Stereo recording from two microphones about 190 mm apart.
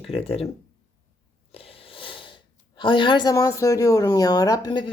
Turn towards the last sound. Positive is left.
turn(degrees=20)  # may be behind; listen again after turning